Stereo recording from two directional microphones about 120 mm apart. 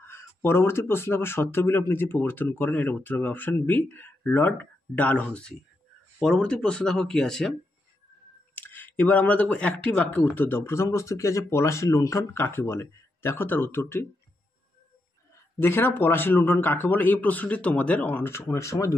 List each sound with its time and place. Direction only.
0.0 s speech: 20° left (ahead or behind); by 7.5 s 5° left (ahead or behind)
8.5 s speech: 15° left (ahead or behind)
15.6 s speech: 20° left (ahead or behind)